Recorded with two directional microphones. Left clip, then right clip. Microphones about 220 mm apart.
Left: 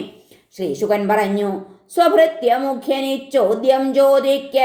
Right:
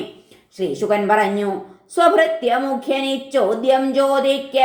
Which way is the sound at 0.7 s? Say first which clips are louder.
Even; 30° left (ahead or behind).